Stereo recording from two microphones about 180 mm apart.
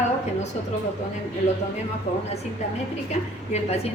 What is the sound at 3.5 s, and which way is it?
Speech, 35° left (ahead or behind).